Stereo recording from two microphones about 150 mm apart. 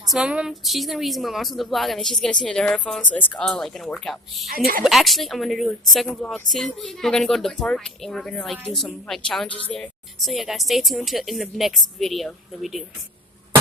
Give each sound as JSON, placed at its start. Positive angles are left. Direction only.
{"t": 0.1, "sound": "a woman's voice", "side_deg": -5}
{"t": 4.4, "sound": "a woman's voice", "side_deg": -80}
{"t": 4.8, "sound": "a woman's voice", "side_deg": 0}